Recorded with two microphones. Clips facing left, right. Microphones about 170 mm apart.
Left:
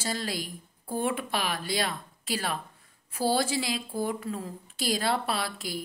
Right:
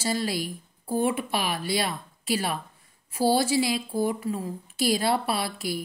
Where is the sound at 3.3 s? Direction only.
50° left (ahead or behind).